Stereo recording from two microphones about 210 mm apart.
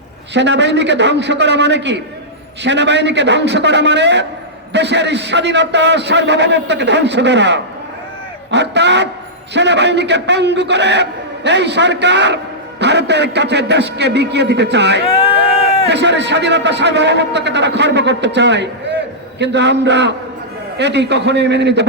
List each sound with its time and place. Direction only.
0.3 s a man's voice: 55° right (ahead or behind)
15.1 s a sound: 25° left (ahead or behind)
15.9 s a man's voice: 55° right (ahead or behind)